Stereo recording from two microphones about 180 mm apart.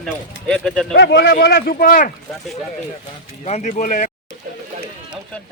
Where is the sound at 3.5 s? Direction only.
40° left (ahead or behind).